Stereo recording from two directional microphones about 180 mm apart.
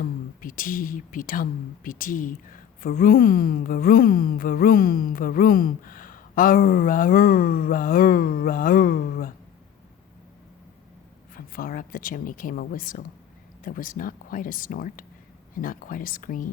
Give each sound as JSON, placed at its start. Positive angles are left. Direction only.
{"t": 0.0, "sound": "speech", "side_deg": 50}
{"t": 11.3, "sound": "speech", "side_deg": 50}